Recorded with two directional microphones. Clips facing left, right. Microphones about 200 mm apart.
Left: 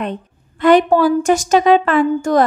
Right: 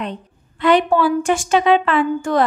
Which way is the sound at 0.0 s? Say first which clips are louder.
Left 4 dB; 50° left (ahead or behind).